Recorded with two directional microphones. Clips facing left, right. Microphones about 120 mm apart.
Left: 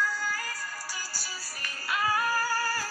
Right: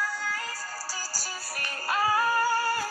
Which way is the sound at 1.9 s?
30° right (ahead or behind).